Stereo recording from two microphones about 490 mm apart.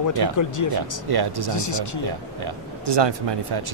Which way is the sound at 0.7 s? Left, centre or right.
Right.